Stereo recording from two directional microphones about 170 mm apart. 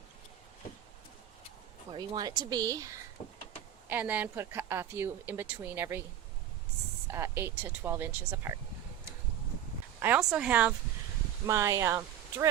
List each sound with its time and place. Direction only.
1.9 s speech: 25° right (ahead or behind)
7.1 s speech: 15° right (ahead or behind)
10.0 s speech: 5° right (ahead or behind)